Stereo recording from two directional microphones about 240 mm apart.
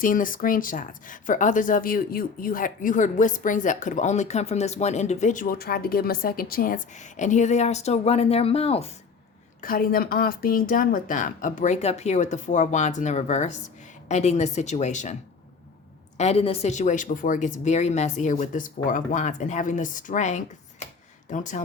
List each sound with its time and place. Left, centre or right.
0.0 s speech: left
9.6 s a woman's voice: left
16.1 s speech: left